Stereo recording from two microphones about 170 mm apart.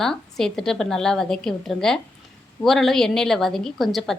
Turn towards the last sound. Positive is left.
turn(degrees=0)  # may be behind; listen again after turning